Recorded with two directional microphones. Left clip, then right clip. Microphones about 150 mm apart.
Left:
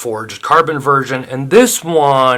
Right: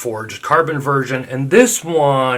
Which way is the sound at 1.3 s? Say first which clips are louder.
Left 2 dB; 35° left (ahead or behind).